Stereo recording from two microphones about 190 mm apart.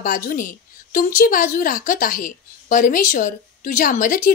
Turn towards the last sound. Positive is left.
turn(degrees=45)  # may be behind; listen again after turning